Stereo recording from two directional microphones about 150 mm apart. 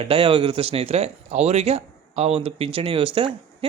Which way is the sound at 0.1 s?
35° right (ahead or behind).